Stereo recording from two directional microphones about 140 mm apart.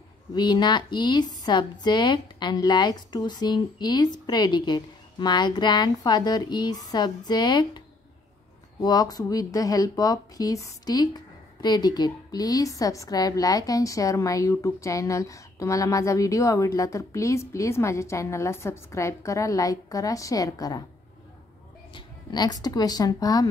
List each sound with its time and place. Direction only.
0.3 s a woman's voice: 30° left (ahead or behind)
8.8 s speech: 30° left (ahead or behind)
21.9 s speech: 30° left (ahead or behind)